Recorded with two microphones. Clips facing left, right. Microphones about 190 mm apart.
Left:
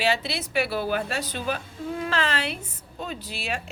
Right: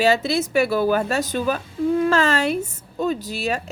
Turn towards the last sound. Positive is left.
turn(degrees=-40)  # may be behind; listen again after turning